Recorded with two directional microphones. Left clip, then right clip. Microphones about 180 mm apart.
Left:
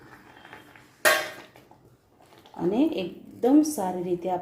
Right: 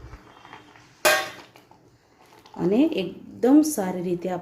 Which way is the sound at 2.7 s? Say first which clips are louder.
Right 3 dB; 35° right (ahead or behind).